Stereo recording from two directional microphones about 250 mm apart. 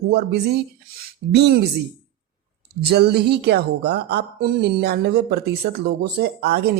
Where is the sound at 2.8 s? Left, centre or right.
Right.